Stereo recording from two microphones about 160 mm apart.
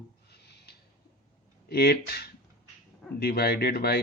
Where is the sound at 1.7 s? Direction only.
80° left.